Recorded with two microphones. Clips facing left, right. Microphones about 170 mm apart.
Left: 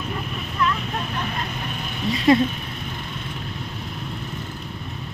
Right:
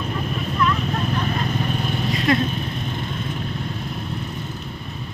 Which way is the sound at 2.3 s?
30° left (ahead or behind).